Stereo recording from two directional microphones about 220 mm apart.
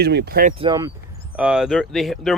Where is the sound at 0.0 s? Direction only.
50° right (ahead or behind).